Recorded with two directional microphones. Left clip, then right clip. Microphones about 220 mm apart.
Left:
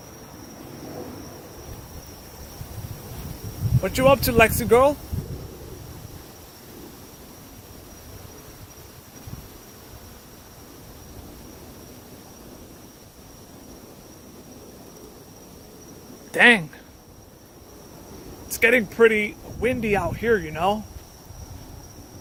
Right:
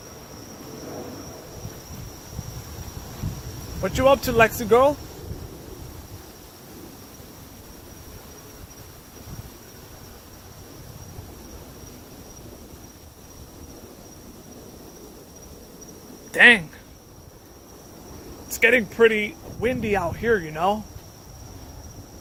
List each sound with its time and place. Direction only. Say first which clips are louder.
3.8 s speech: even; 15° left (ahead or behind)
16.3 s cricket: right 2 dB; 15° left (ahead or behind)
18.4 s speech: even; 15° left (ahead or behind)